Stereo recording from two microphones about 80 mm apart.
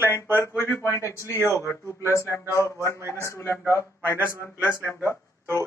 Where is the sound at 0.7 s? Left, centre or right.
Left.